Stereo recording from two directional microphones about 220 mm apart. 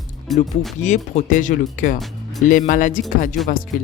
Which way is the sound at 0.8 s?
30° left (ahead or behind).